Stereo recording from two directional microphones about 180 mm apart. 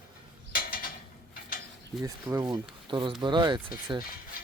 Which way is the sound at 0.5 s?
55° left (ahead or behind).